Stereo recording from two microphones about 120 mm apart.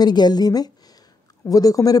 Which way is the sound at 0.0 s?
35° left (ahead or behind).